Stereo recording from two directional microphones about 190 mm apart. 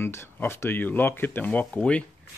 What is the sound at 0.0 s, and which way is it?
Speech, 10° left (ahead or behind).